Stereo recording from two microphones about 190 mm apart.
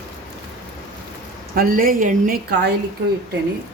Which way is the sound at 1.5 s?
50° right (ahead or behind).